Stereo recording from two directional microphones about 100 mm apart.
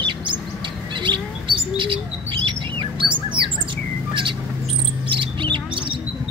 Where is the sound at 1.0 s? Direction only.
55° right (ahead or behind).